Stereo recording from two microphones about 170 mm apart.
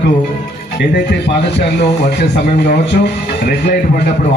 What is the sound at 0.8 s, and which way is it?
Speech, 80° left.